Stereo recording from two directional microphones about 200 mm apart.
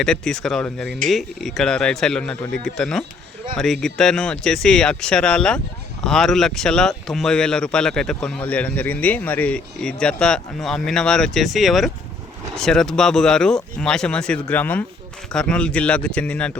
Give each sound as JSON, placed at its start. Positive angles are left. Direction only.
{"t": 0.0, "sound": "speech", "side_deg": 5}